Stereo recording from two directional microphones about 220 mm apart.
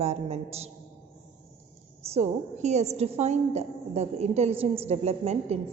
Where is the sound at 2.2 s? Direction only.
30° right (ahead or behind).